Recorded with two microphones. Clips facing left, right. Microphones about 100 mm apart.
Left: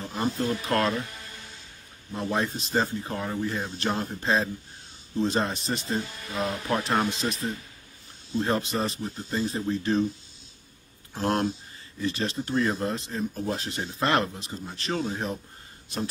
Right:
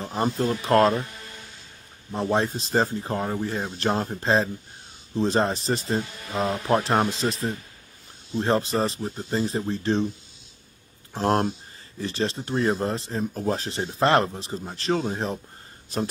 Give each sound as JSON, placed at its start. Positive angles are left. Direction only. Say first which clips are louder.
{"t": 0.0, "sound": "speech", "louder": "right 3 dB", "side_deg": -35}
{"t": 2.1, "sound": "speech", "louder": "right 4 dB", "side_deg": -30}
{"t": 11.1, "sound": "speech", "louder": "right 3 dB", "side_deg": -35}